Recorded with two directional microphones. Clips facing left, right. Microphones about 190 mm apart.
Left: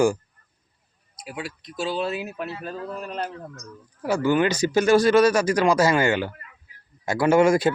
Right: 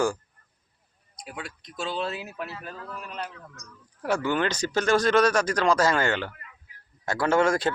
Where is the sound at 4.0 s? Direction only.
5° left (ahead or behind).